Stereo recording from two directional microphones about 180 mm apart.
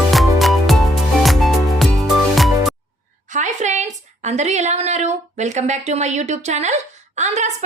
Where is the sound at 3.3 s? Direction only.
40° right (ahead or behind).